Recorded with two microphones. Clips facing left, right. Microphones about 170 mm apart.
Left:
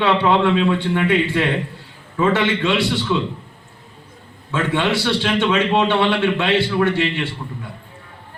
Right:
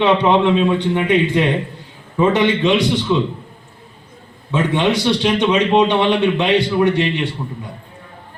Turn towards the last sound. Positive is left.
turn(degrees=-15)  # may be behind; listen again after turning